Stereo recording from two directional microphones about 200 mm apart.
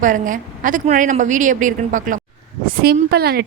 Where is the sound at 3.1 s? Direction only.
50° right (ahead or behind).